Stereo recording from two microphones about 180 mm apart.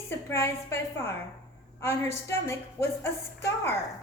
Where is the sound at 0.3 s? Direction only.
15° left (ahead or behind).